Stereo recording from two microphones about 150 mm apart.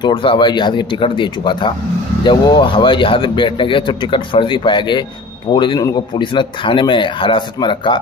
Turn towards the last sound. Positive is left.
turn(degrees=35)  # may be behind; listen again after turning